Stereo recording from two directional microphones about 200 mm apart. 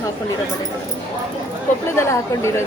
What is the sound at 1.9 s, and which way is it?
Speech, 15° left (ahead or behind).